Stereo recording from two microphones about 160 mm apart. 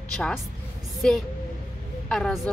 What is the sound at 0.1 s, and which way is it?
Speech, 5° left (ahead or behind).